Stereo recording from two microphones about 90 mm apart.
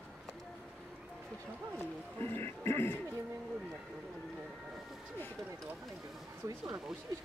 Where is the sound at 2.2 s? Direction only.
25° left (ahead or behind).